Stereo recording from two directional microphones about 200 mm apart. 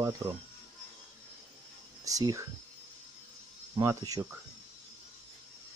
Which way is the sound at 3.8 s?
20° right (ahead or behind).